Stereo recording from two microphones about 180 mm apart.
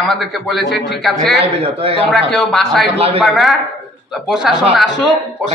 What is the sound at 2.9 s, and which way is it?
Speech, 35° right (ahead or behind).